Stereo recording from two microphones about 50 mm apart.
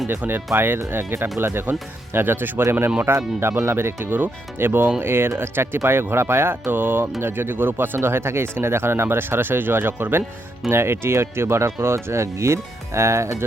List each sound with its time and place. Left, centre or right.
0.5 s speech: right
3.1 s speech: right